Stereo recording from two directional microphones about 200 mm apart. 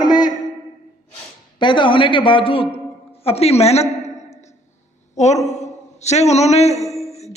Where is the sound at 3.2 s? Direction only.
30° left (ahead or behind).